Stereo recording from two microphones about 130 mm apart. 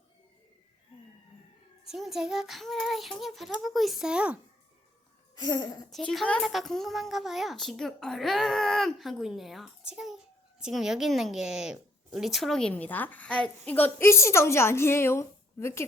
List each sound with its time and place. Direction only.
1.9 s a child's voice: 5° right (ahead or behind)
5.3 s a sound: 35° left (ahead or behind)
5.9 s a child's voice: 5° left (ahead or behind); by 15.8 s 20° left (ahead or behind)